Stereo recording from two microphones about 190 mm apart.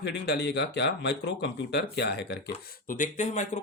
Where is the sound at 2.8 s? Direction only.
45° left (ahead or behind).